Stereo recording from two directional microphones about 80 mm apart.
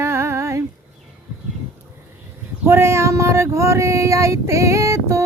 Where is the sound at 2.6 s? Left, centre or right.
Right.